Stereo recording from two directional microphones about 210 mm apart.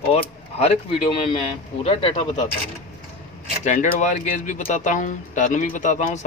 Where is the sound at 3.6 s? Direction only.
35° left (ahead or behind).